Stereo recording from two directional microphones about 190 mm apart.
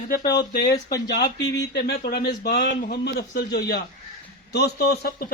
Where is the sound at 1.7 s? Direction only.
60° left (ahead or behind).